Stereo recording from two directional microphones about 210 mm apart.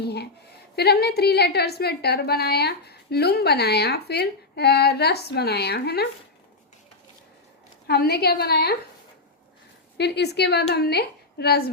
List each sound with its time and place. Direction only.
0.0 s a sound: 50° left (ahead or behind)
0.8 s a woman's voice: 50° left (ahead or behind)
7.9 s a woman's voice: 50° left (ahead or behind)
10.0 s a woman's voice: 50° left (ahead or behind)